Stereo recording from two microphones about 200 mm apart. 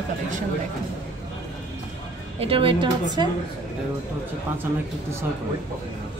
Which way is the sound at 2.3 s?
25° right (ahead or behind).